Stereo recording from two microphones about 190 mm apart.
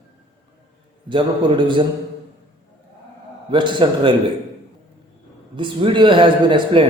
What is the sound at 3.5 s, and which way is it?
Speech, 25° right (ahead or behind).